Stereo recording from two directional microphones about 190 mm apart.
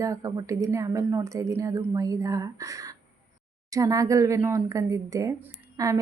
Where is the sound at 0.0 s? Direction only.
15° right (ahead or behind).